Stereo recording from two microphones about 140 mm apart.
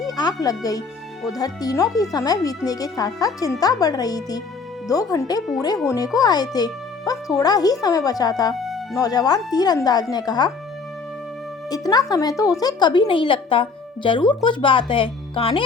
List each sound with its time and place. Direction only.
0.0 s speech: 25° left (ahead or behind)
11.7 s speech: 25° left (ahead or behind)